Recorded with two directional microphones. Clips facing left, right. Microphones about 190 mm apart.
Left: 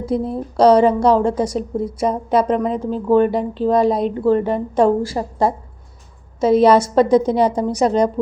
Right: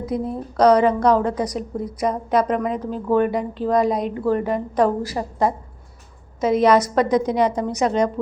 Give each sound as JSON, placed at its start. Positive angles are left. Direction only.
{"t": 0.0, "sound": "a woman's voice", "side_deg": 30}